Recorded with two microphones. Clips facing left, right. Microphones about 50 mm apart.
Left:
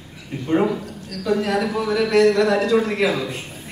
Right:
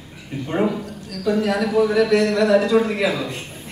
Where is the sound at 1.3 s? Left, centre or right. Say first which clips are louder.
Right 1 dB; centre.